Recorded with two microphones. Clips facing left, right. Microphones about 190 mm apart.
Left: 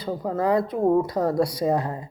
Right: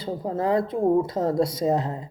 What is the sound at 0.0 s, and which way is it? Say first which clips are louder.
Speech: left 1 dB; 25° right (ahead or behind).